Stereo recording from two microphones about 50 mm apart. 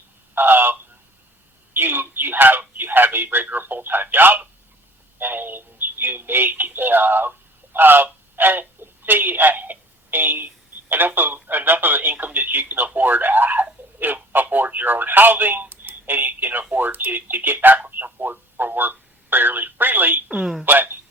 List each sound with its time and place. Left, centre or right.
0.3 s a sound: right
1.7 s speech: right
20.4 s speech: centre
20.7 s speech: right